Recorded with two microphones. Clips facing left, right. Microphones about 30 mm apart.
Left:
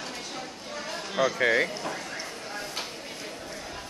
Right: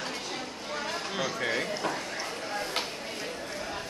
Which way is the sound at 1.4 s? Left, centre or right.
Left.